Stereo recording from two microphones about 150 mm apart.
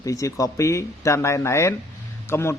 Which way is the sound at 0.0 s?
20° left (ahead or behind).